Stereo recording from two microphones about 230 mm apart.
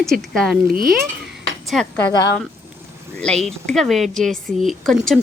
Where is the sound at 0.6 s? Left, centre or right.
Right.